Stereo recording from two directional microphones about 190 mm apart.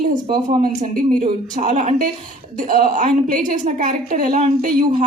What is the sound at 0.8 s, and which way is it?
A woman's voice, 40° right (ahead or behind).